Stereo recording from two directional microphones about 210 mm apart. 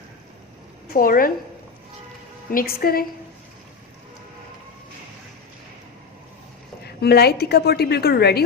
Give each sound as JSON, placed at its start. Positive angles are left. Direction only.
{"t": 0.9, "sound": "a woman's voice", "side_deg": 45}
{"t": 2.5, "sound": "a woman's voice", "side_deg": 45}
{"t": 6.8, "sound": "a woman's voice", "side_deg": 50}